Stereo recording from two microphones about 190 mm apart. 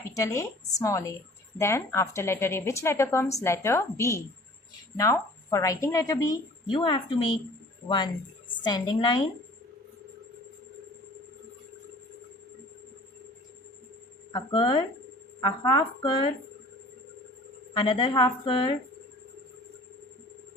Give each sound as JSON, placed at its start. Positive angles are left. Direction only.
{"t": 0.0, "sound": "a woman's voice", "side_deg": 15}
{"t": 14.3, "sound": "speech", "side_deg": 25}
{"t": 17.7, "sound": "speech", "side_deg": 25}